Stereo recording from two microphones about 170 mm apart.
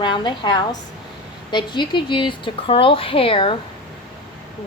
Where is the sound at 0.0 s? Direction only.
25° left (ahead or behind).